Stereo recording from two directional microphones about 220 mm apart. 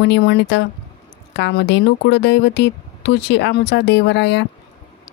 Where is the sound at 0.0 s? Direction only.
50° left (ahead or behind).